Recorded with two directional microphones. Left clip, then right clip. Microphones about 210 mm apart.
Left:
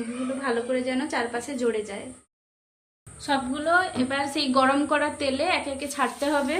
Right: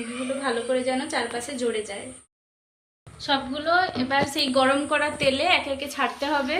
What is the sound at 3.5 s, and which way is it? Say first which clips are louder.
A woman's voice: left 1 dB; 40° left (ahead or behind).